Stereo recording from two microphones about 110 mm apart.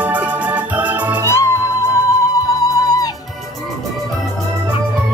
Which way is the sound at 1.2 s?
25° left (ahead or behind).